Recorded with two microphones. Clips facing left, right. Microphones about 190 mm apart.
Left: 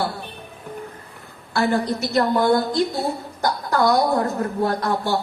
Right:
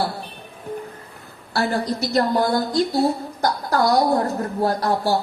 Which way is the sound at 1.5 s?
35° right (ahead or behind).